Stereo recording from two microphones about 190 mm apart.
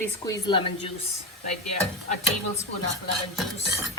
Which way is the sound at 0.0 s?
20° left (ahead or behind).